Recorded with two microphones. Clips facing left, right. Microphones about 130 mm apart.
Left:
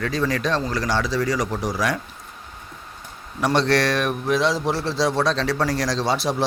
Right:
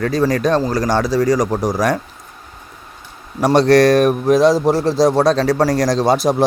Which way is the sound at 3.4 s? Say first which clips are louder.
Right 9 dB; 40° right (ahead or behind).